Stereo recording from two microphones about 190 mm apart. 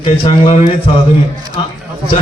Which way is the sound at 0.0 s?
30° left (ahead or behind).